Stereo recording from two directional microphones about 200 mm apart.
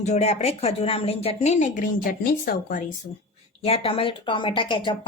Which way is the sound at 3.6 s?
30° left (ahead or behind).